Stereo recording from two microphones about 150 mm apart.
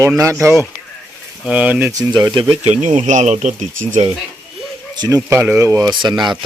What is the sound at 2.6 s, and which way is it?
Speech, 50° right (ahead or behind).